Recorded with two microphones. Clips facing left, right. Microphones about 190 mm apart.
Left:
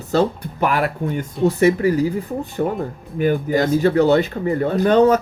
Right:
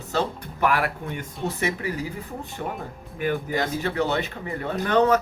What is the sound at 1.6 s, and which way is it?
Speech, 35° left (ahead or behind).